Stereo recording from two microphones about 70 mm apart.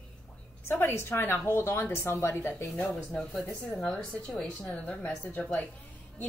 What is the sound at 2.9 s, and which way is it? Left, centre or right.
A woman's voice, centre.